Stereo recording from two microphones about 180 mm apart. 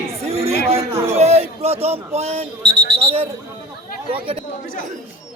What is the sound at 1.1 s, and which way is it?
Speech, 35° right (ahead or behind).